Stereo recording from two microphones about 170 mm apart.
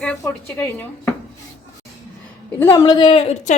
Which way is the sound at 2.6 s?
25° left (ahead or behind).